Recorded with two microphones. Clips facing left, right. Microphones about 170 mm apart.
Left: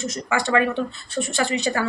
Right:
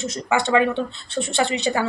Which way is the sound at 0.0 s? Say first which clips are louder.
Right 2 dB; 25° right (ahead or behind).